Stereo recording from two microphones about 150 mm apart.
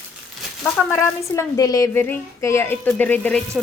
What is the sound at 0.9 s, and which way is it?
A woman's voice, 20° left (ahead or behind).